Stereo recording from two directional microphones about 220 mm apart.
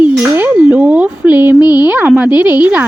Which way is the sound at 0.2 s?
10° right (ahead or behind).